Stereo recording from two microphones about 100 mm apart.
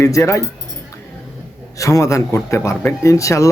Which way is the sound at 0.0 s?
30° left (ahead or behind).